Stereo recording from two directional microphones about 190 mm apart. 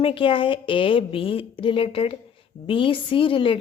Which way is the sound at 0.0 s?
30° left (ahead or behind).